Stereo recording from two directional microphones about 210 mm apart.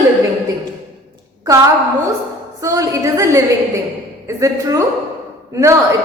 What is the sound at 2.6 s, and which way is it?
A woman's voice, 15° right (ahead or behind).